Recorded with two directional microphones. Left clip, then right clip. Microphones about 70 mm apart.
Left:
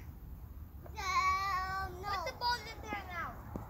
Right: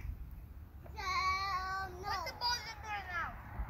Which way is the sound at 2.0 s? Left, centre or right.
Left.